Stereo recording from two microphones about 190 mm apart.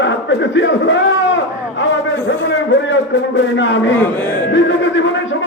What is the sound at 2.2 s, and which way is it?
A man's voice, 75° left (ahead or behind).